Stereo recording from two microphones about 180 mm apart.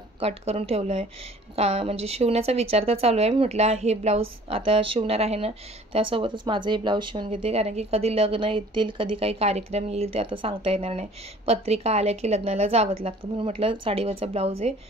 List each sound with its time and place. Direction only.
0.2 s a woman's voice: 35° right (ahead or behind)